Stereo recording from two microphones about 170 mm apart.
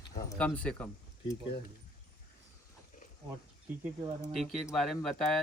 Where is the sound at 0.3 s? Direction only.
5° left (ahead or behind).